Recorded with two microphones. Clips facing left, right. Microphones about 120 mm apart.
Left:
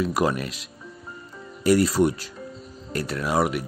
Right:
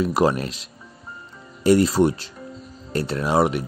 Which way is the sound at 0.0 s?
30° right (ahead or behind).